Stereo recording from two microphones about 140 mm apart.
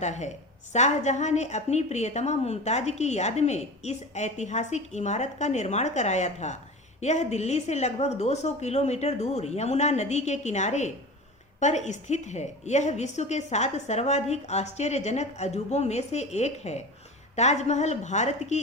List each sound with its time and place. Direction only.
0.0 s a woman's voice: 55° left (ahead or behind)